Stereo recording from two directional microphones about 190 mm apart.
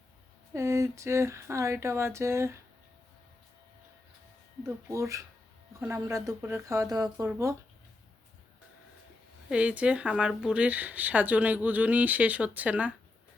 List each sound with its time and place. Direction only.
0.5 s speech: 15° right (ahead or behind)
4.9 s speech: 15° right (ahead or behind)
9.5 s speech: 5° right (ahead or behind)